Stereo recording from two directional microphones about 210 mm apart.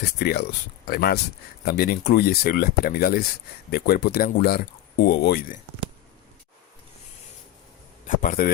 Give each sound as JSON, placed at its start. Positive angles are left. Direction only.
{"t": 0.2, "sound": "speech", "side_deg": 50}
{"t": 8.0, "sound": "a man's voice", "side_deg": 40}